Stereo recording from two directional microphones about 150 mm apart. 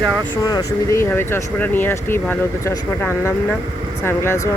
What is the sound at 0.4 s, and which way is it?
Speech, 20° left (ahead or behind).